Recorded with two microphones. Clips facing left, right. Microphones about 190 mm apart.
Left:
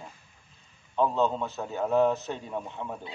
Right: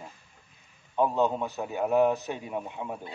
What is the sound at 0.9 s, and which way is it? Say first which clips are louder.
A man's voice: even; 15° right (ahead or behind).